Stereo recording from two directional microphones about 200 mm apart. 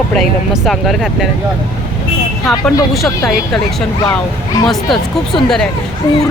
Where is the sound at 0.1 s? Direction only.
Centre (ahead or behind).